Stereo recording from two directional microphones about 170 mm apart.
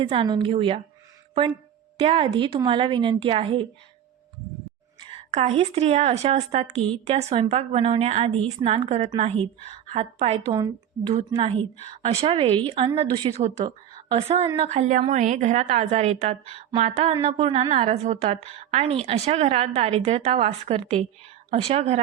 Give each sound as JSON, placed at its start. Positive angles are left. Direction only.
{"t": 0.0, "sound": "a woman's voice", "side_deg": -30}
{"t": 2.0, "sound": "a woman's voice", "side_deg": -35}
{"t": 4.9, "sound": "a woman's voice", "side_deg": -35}
{"t": 10.4, "sound": "a woman's voice", "side_deg": -25}
{"t": 11.3, "sound": "a woman's voice", "side_deg": -35}
{"t": 13.4, "sound": "a woman's voice", "side_deg": -35}
{"t": 13.9, "sound": "a sound", "side_deg": -30}
{"t": 14.4, "sound": "a woman's voice", "side_deg": -25}
{"t": 14.7, "sound": "a woman's voice", "side_deg": -45}